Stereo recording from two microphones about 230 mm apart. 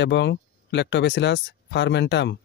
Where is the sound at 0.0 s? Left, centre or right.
Left.